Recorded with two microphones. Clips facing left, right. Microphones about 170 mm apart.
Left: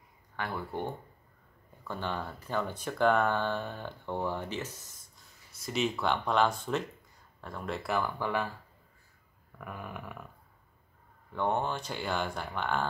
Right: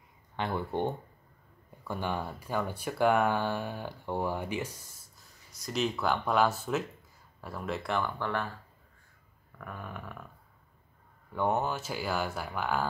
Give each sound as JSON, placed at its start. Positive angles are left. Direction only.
{"t": 0.4, "sound": "speech", "side_deg": -25}
{"t": 1.9, "sound": "speech", "side_deg": -10}
{"t": 5.6, "sound": "speech", "side_deg": 0}
{"t": 9.6, "sound": "a sound", "side_deg": 10}
{"t": 11.3, "sound": "speech", "side_deg": -5}